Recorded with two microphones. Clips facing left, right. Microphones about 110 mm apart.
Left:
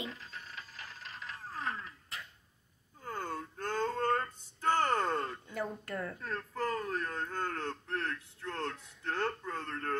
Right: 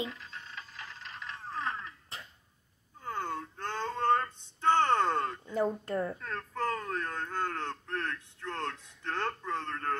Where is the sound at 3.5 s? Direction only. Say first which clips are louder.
Left 6 dB; 40° left (ahead or behind).